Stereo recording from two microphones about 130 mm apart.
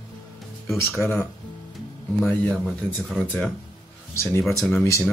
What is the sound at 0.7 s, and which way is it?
Speech, 20° left (ahead or behind).